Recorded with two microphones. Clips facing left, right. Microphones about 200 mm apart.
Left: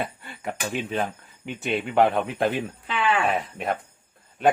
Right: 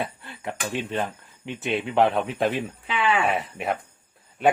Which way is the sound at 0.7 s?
Centre (ahead or behind).